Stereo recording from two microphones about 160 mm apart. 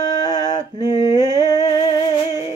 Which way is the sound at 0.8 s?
20° left (ahead or behind).